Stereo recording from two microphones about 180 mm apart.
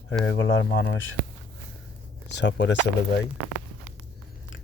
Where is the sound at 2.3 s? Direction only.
75° left (ahead or behind).